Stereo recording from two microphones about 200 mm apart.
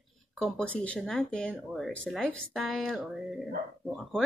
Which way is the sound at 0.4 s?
5° left (ahead or behind).